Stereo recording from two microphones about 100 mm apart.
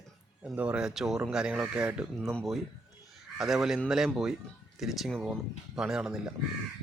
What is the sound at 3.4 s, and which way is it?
Speech, 5° right (ahead or behind).